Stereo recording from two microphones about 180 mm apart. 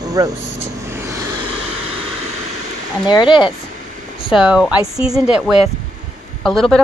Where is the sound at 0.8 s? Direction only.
15° right (ahead or behind).